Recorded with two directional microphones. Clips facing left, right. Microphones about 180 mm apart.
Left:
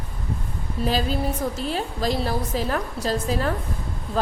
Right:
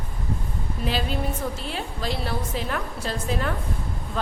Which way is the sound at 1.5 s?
40° left (ahead or behind).